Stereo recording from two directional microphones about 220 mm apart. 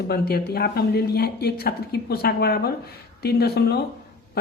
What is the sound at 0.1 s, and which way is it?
Speech, 45° left (ahead or behind).